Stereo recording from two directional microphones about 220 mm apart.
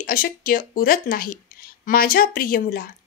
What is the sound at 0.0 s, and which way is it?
Speech, 40° left (ahead or behind).